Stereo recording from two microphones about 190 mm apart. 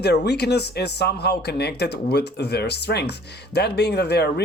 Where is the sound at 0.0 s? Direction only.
60° left (ahead or behind).